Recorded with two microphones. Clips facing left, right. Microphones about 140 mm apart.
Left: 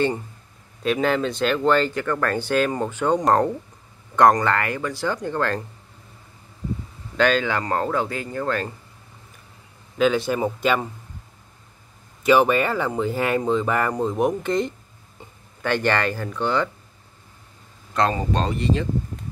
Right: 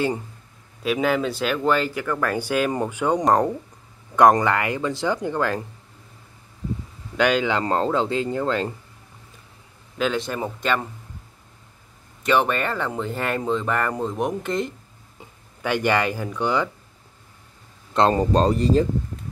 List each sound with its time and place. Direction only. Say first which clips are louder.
0.8 s speech: even; 5° right (ahead or behind)
7.2 s speech: even; 15° right (ahead or behind)
9.9 s speech: left 4 dB; centre (ahead or behind)
12.2 s speech: left 4 dB; 5° left (ahead or behind); by 16.7 s 10° right (ahead or behind)
18.1 s speech: right 5 dB; 40° right (ahead or behind)